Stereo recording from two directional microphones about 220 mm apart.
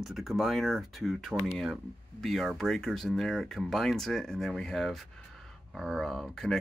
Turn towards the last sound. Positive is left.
turn(degrees=0)  # may be behind; listen again after turning